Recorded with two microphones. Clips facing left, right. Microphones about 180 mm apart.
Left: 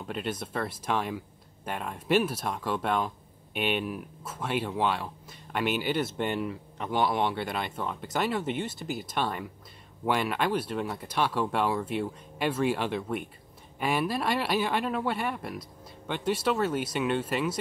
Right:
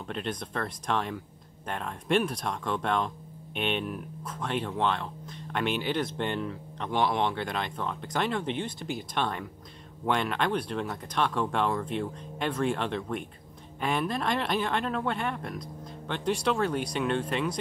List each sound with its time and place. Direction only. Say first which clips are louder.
0.0 s speech: left 1 dB; 5° left (ahead or behind)